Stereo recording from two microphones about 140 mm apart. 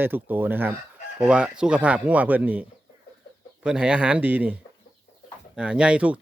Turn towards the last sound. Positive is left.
turn(degrees=-10)  # may be behind; listen again after turning